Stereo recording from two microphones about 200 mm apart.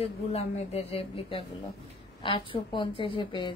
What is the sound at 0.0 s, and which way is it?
A woman's voice, 30° left (ahead or behind).